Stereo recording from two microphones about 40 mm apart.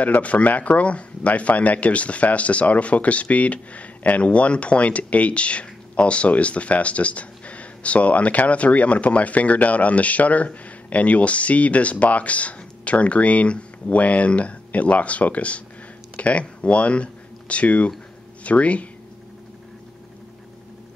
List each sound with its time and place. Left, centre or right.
0.0 s speech: left